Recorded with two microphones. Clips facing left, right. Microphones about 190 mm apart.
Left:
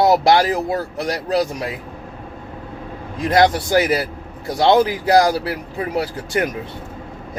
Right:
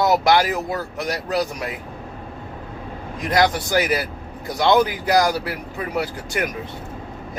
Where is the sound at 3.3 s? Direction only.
25° left (ahead or behind).